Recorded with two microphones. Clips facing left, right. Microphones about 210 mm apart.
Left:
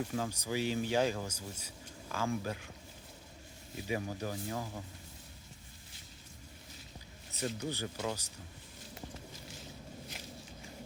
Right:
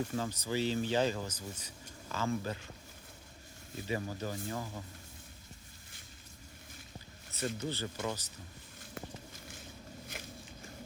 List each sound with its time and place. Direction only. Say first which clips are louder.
0.1 s speech: right 1 dB; 10° left (ahead or behind)
3.8 s speech: even; 10° left (ahead or behind)
7.3 s speech: even; 15° left (ahead or behind)
9.0 s walk: right 2 dB; 50° right (ahead or behind)